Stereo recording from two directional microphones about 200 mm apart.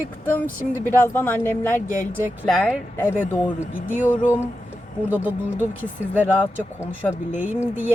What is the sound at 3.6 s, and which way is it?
Speech, 40° left (ahead or behind).